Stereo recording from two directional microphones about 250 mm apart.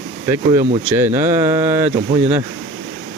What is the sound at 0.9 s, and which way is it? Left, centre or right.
Speech, centre.